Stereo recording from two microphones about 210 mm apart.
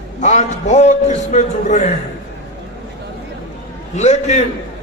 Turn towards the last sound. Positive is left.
turn(degrees=35)  # may be behind; listen again after turning